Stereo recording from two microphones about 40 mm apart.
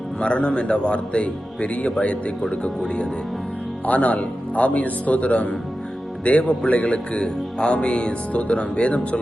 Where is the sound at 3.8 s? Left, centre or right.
Left.